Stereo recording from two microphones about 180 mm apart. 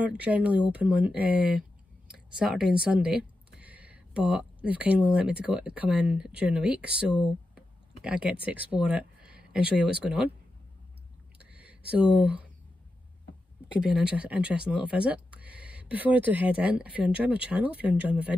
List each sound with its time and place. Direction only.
0.0 s speech: 5° right (ahead or behind)
11.3 s a sound: 5° right (ahead or behind)
13.7 s speech: 5° right (ahead or behind)